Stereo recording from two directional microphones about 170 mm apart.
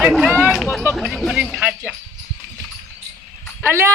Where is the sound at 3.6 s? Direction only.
15° right (ahead or behind).